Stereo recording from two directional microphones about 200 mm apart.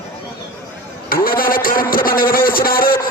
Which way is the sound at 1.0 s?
45° left (ahead or behind).